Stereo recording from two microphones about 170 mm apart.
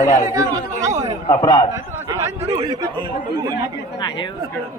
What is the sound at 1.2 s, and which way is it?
Speech, 20° left (ahead or behind).